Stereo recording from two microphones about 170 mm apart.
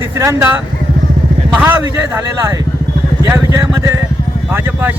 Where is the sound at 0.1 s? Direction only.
15° right (ahead or behind).